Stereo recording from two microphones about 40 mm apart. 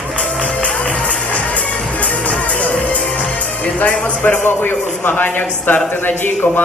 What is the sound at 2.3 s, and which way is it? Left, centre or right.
Music, left.